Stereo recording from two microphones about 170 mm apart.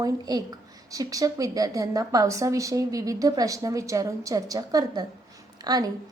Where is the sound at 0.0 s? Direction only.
25° right (ahead or behind).